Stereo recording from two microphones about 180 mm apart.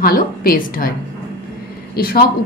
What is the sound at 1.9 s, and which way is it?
Speech, 55° left (ahead or behind).